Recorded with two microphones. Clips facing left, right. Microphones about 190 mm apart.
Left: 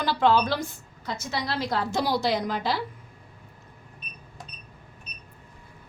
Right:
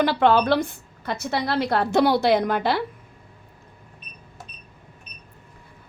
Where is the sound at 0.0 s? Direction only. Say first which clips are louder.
Right 4 dB; 60° right (ahead or behind).